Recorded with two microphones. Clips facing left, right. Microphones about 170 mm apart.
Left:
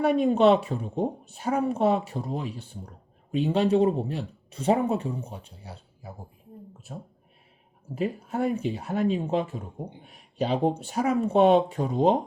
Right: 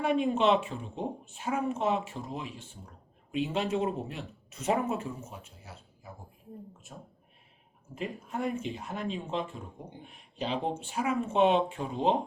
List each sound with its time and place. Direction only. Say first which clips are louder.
0.0 s speech: left 6 dB; 40° left (ahead or behind)
7.9 s speech: left 7 dB; 40° left (ahead or behind)